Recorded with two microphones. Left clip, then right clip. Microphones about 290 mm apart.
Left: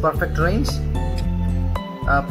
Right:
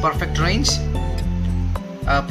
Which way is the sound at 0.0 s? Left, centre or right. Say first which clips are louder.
Left 1 dB; right.